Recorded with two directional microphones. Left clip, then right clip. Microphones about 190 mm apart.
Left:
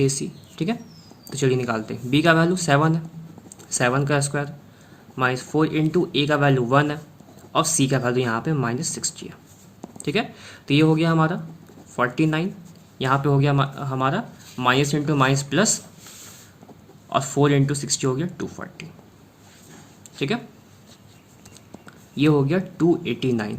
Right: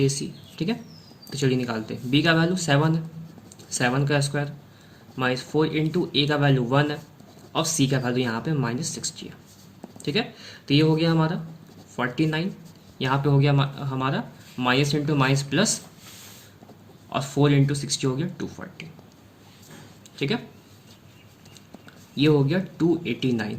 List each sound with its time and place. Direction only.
0.0 s speech: 40° left (ahead or behind)
17.1 s speech: 40° left (ahead or behind)
20.1 s speech: 35° left (ahead or behind)
22.1 s speech: 40° left (ahead or behind)